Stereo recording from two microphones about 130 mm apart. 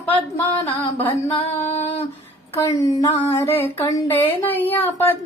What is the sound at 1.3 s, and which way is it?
Female singing, 50° left (ahead or behind).